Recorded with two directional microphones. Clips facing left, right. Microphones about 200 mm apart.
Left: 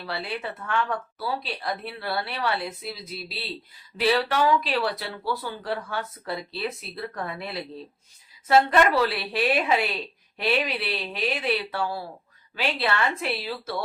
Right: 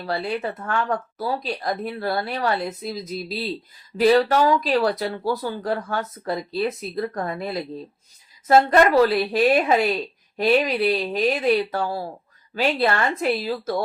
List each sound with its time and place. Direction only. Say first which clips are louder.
0.0 s speech: right 6 dB; 45° right (ahead or behind)